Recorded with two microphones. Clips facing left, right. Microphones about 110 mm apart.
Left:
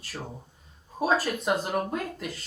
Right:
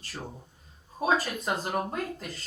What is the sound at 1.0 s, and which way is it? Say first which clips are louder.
A woman's voice: left 2 dB; 5° left (ahead or behind).